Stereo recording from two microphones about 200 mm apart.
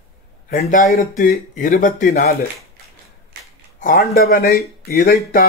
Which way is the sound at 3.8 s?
45° left (ahead or behind).